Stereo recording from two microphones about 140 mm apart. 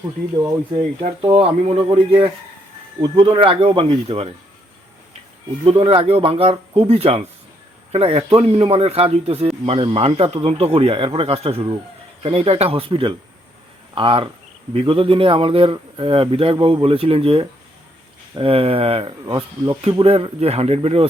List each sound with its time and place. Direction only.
1.2 s a man's voice: 40° right (ahead or behind)
5.6 s a man's voice: 40° right (ahead or behind)